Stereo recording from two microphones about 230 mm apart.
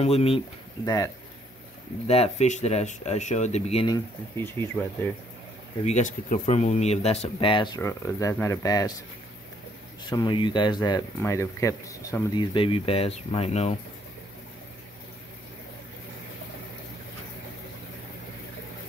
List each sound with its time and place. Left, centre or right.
0.0 s speech: left
0.8 s speech: centre
2.0 s speech: left
5.9 s speech: left; by 8.9 s centre
10.0 s speech: centre